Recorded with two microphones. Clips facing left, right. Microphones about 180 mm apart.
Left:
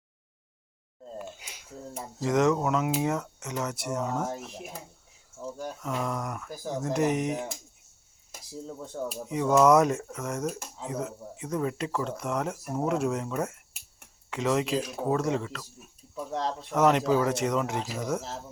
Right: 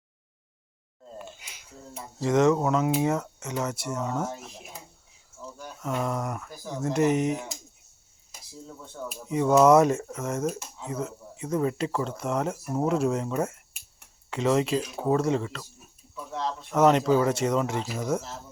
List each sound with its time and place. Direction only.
2.1 s speech: centre (ahead or behind)
5.5 s a sound: 40° left (ahead or behind)
6.1 s speech: 5° right (ahead or behind)
8.6 s speech: 40° left (ahead or behind)
9.3 s speech: centre (ahead or behind)
16.1 s speech: 40° left (ahead or behind)
16.7 s speech: centre (ahead or behind)